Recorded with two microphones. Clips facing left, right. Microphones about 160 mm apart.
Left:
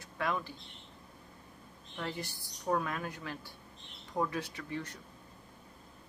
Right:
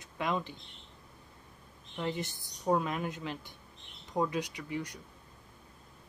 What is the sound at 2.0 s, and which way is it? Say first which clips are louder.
Speech: right 4 dB; 20° right (ahead or behind).